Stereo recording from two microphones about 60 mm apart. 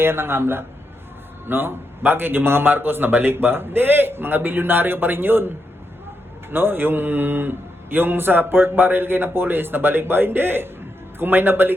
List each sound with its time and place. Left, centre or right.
0.0 s speech: right